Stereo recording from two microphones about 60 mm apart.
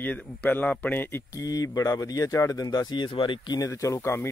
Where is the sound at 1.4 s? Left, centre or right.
Left.